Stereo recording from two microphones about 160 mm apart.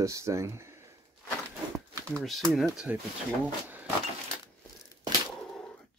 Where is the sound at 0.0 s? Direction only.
20° right (ahead or behind).